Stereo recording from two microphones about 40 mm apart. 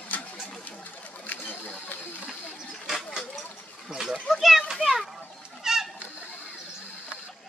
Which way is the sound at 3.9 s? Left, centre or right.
Centre.